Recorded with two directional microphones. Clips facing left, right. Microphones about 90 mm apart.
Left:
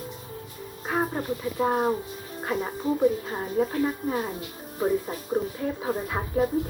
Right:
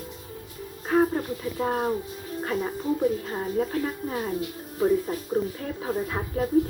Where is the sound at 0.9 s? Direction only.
15° left (ahead or behind).